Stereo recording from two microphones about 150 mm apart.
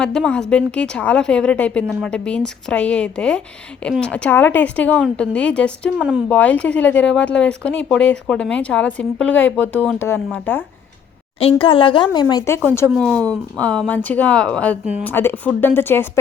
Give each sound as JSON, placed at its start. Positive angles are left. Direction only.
{"t": 0.0, "sound": "speech", "side_deg": 5}
{"t": 6.0, "sound": "speech", "side_deg": -5}
{"t": 6.2, "sound": "speech", "side_deg": 10}
{"t": 11.3, "sound": "a woman's voice", "side_deg": 40}
{"t": 12.1, "sound": "speech", "side_deg": 25}
{"t": 13.1, "sound": "speech", "side_deg": 10}